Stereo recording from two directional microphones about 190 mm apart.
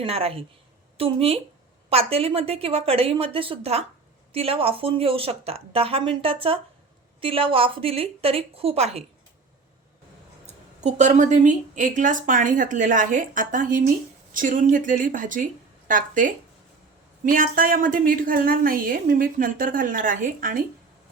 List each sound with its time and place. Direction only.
0.0 s a woman's voice: 30° right (ahead or behind)
10.4 s a woman's voice: 35° right (ahead or behind)